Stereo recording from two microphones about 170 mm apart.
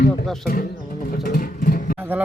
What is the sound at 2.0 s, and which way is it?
Speech, 10° right (ahead or behind).